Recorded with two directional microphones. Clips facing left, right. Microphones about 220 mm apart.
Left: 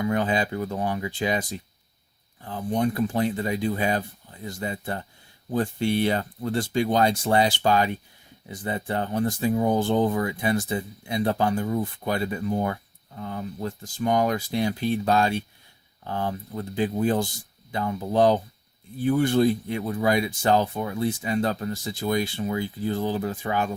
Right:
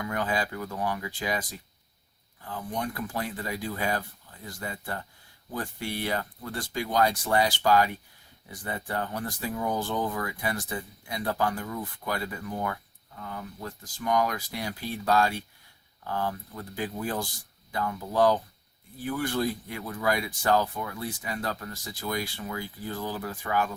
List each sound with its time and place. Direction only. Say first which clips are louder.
0.0 s speech: left 6 dB; 25° left (ahead or behind)